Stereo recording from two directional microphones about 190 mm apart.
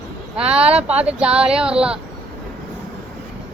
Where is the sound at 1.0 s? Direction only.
5° right (ahead or behind).